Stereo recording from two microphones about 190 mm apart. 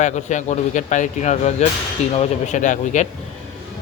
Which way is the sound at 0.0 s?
40° left (ahead or behind).